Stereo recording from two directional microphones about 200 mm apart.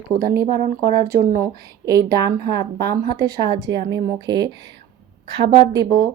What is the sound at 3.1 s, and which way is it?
A woman's voice, 20° right (ahead or behind).